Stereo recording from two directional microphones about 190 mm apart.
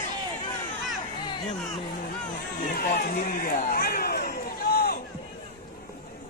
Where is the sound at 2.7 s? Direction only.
45° left (ahead or behind).